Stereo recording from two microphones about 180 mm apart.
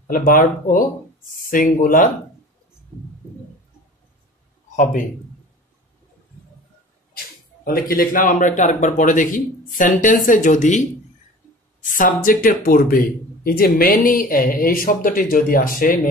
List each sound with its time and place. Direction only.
0.1 s speech: 50° left (ahead or behind)
7.6 s speech: 55° left (ahead or behind)
11.9 s speech: 50° left (ahead or behind)